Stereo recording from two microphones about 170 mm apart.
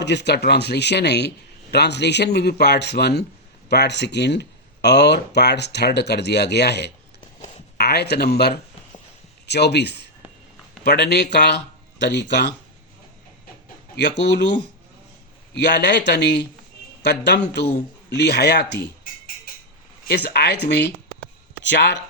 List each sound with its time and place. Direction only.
0.0 s speech: 90° left
13.9 s a man's voice: 90° left
20.1 s speech: 75° left (ahead or behind); by 22.0 s 90° left